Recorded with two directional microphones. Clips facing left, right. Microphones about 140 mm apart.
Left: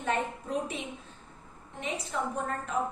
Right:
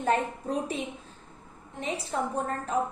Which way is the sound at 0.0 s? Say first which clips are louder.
Right 4 dB; 35° right (ahead or behind).